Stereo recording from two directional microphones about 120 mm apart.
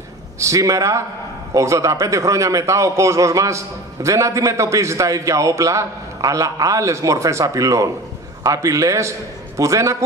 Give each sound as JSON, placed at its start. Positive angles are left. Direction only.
{"t": 0.4, "sound": "a man's voice", "side_deg": -25}